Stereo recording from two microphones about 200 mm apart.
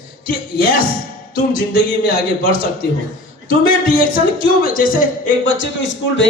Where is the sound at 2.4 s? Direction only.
45° left (ahead or behind).